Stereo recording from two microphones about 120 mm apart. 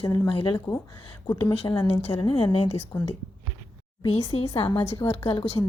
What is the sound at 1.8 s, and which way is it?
Speech, 40° left (ahead or behind).